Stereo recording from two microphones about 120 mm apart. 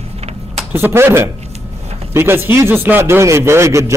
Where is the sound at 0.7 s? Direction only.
20° right (ahead or behind).